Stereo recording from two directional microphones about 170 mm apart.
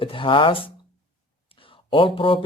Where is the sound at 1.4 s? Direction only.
30° left (ahead or behind).